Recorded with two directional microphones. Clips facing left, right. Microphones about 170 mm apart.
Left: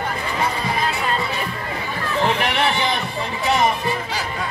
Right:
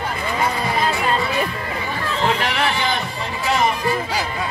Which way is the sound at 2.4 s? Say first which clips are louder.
Left 1 dB; 20° left (ahead or behind).